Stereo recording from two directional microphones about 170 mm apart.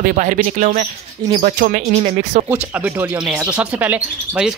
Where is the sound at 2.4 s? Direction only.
10° right (ahead or behind).